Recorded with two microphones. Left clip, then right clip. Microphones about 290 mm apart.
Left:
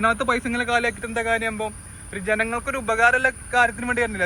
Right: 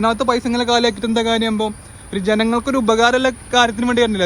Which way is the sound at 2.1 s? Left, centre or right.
Centre.